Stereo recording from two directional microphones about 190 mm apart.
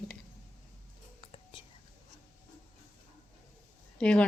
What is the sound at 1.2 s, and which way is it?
Whispering, 30° left (ahead or behind).